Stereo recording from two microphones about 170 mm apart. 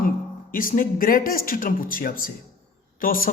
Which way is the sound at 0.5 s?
55° left (ahead or behind).